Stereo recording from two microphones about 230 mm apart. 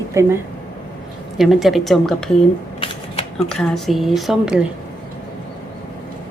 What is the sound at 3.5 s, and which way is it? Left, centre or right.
A woman's voice, centre.